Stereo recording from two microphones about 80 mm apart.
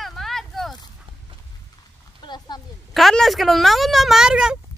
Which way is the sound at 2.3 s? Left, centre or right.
Left.